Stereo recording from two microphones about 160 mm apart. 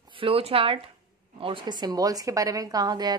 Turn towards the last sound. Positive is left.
turn(degrees=-25)  # may be behind; listen again after turning